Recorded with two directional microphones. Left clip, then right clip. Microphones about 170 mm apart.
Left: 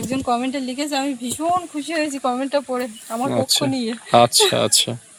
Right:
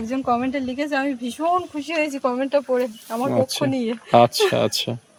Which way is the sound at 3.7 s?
10° right (ahead or behind).